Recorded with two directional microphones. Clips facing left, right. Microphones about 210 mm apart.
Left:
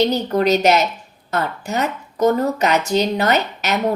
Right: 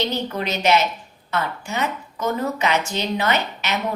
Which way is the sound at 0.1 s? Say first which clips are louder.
Left 8 dB; 40° left (ahead or behind).